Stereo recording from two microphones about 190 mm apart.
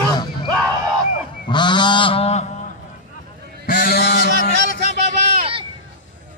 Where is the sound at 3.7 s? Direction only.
50° left (ahead or behind).